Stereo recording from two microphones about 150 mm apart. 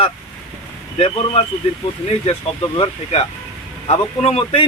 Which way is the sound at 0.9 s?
40° left (ahead or behind).